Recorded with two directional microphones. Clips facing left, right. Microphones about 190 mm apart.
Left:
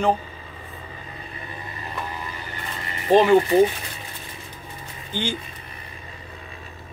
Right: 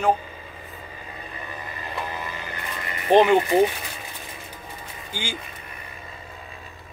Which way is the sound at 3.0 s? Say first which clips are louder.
Left 1 dB; 20° right (ahead or behind).